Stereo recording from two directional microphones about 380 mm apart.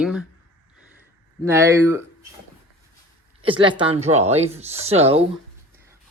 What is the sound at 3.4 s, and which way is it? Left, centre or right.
Speech, centre.